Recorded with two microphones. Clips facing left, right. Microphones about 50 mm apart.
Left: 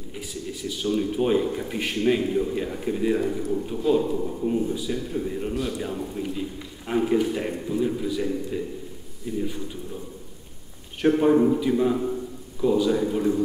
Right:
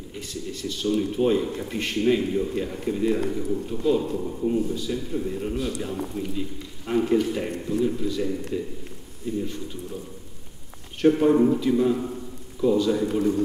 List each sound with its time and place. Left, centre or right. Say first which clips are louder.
0.1 s a man's voice: even; centre
11.0 s a man's voice: right 1 dB; centre
13.1 s a man's voice: even; left